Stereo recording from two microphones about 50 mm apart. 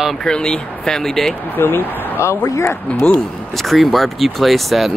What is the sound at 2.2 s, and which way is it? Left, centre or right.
Speech, left.